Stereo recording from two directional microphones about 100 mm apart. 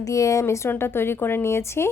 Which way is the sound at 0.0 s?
35° left (ahead or behind).